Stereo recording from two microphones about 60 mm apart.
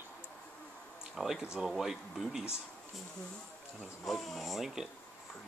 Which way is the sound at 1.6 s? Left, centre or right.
Centre.